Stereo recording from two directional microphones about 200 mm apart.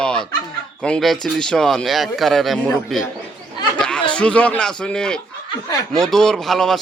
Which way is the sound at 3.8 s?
5° left (ahead or behind).